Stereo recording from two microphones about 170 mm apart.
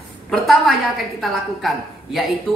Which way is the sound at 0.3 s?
Centre (ahead or behind).